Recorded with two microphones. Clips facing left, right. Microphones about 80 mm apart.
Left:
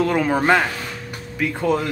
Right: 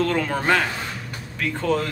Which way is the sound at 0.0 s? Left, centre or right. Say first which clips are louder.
Left 4 dB; centre.